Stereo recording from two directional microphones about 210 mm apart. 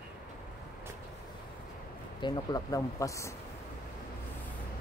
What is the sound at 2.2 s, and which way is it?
Speech, 20° left (ahead or behind).